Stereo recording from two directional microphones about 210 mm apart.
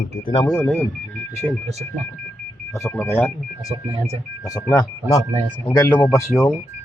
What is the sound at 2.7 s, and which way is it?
Speech, 10° left (ahead or behind).